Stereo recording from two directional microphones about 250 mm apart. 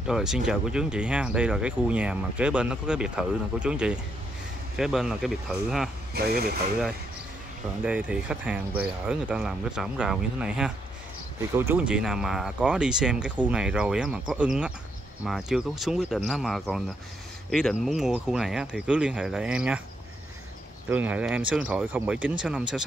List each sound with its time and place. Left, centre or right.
0.0 s speech: centre
6.1 s speech: right
7.8 s speech: centre
20.9 s speech: centre